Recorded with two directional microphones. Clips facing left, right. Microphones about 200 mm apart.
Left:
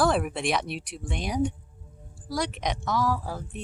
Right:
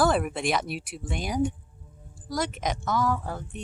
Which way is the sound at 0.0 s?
Centre (ahead or behind).